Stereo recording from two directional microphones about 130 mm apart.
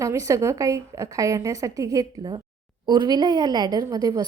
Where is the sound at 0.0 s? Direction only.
25° right (ahead or behind).